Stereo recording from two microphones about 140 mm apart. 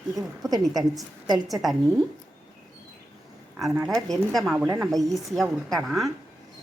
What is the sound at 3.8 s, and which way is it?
Speech, centre (ahead or behind).